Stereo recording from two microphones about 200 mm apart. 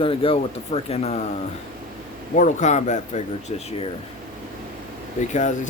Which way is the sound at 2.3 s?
40° left (ahead or behind).